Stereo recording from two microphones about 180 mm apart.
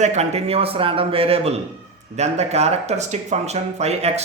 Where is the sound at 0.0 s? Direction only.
40° right (ahead or behind).